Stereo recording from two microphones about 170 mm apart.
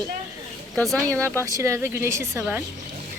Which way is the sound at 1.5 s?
15° right (ahead or behind).